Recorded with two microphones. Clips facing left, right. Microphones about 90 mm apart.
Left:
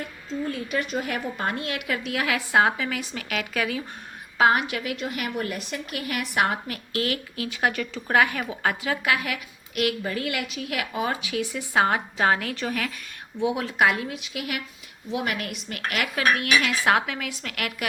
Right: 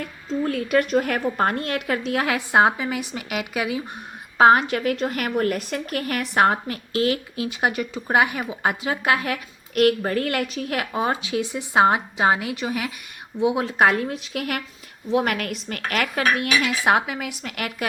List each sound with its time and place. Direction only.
0.4 s a woman's voice: 55° right (ahead or behind); by 3.8 s 20° right (ahead or behind)
4.4 s a woman's voice: 35° right (ahead or behind)
16.4 s speech: 20° right (ahead or behind)